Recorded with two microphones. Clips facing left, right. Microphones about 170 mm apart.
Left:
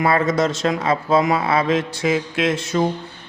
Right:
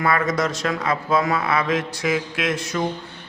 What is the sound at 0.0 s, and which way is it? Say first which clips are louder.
A man's voice: left 3 dB; 25° left (ahead or behind).